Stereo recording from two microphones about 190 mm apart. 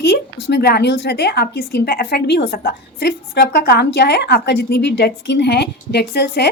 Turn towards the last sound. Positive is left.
turn(degrees=60)  # may be behind; listen again after turning